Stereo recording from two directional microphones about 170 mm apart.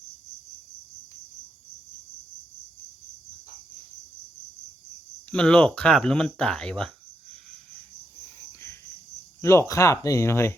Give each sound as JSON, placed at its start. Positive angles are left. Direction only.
{"t": 5.3, "sound": "speech", "side_deg": 5}
{"t": 9.4, "sound": "speech", "side_deg": 15}